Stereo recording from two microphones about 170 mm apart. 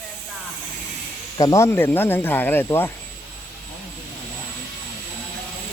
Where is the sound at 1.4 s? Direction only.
15° left (ahead or behind).